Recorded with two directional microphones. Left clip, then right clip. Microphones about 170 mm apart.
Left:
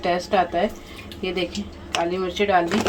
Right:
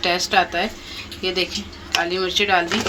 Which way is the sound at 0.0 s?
35° left (ahead or behind).